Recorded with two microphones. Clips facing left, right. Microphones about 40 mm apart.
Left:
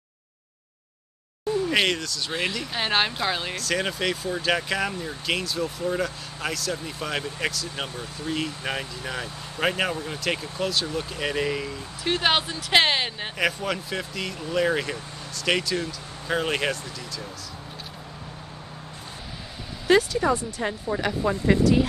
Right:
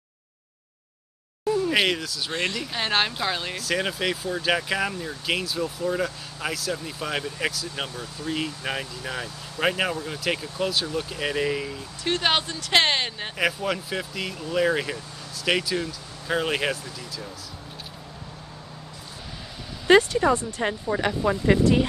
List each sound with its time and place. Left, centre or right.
1.7 s speech: centre
7.9 s speech: left
8.3 s speech: centre
19.9 s a sound: centre
20.2 s speech: centre